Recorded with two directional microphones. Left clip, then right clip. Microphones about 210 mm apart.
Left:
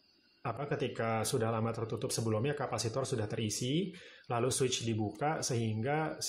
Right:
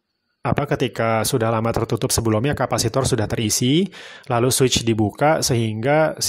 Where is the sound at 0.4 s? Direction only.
45° right (ahead or behind).